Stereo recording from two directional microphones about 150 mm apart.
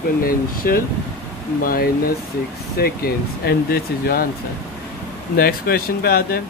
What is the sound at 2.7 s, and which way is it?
Speech, 90° left.